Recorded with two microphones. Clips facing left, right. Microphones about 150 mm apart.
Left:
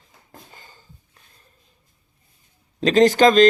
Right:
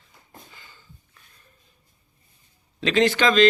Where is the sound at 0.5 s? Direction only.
45° left (ahead or behind).